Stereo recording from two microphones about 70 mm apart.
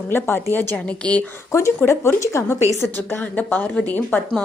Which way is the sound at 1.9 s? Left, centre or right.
Left.